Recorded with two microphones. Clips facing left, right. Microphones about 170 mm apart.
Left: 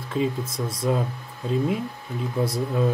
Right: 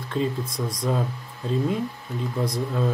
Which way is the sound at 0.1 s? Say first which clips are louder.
Left 1 dB; 5° left (ahead or behind).